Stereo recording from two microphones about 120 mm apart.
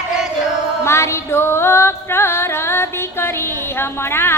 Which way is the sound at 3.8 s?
20° left (ahead or behind).